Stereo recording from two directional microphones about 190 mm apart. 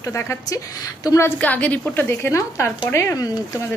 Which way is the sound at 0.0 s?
15° left (ahead or behind).